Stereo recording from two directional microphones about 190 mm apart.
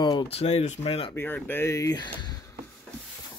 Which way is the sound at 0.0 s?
25° left (ahead or behind).